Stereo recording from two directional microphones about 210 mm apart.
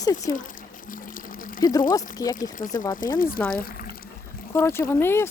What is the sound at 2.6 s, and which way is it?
Speech, 40° left (ahead or behind).